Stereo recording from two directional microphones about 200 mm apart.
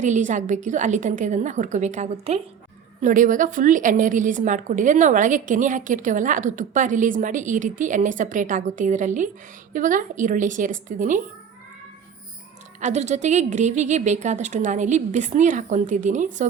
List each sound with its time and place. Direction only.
0.0 s a woman's voice: 40° right (ahead or behind)
12.8 s a woman's voice: 35° right (ahead or behind)